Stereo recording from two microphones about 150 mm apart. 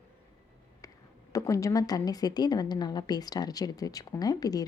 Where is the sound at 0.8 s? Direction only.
20° left (ahead or behind).